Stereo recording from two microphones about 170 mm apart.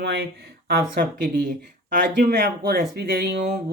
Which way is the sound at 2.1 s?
75° right (ahead or behind).